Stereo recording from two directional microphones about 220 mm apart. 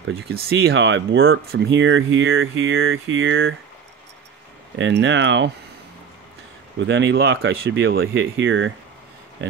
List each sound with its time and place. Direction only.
0.3 s speech: 45° right (ahead or behind); by 1.4 s 65° right (ahead or behind)
1.5 s speech: 50° right (ahead or behind)
4.7 s speech: 55° right (ahead or behind)
6.9 s speech: 55° right (ahead or behind)